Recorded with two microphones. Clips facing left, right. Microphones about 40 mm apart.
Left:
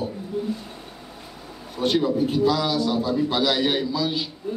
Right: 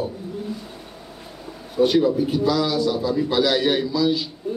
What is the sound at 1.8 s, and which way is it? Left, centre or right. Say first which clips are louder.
Speech: right 6 dB; centre.